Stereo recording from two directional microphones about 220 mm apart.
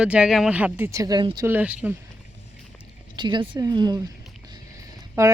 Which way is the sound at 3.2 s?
20° right (ahead or behind).